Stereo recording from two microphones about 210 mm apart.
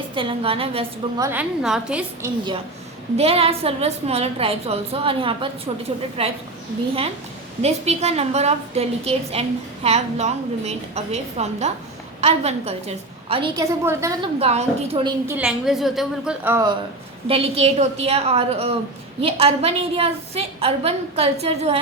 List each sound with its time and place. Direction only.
0.1 s a woman's voice: 25° right (ahead or behind); by 2.3 s 5° right (ahead or behind)
3.2 s a woman's voice: 30° right (ahead or behind)
7.6 s a woman's voice: 30° right (ahead or behind); by 14.3 s 15° right (ahead or behind)
14.3 s a woman's voice: 30° right (ahead or behind)
15.3 s a woman's voice: 5° right (ahead or behind)
17.2 s a woman's voice: 30° right (ahead or behind)